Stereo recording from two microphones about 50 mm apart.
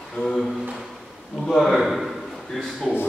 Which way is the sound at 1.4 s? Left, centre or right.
Centre.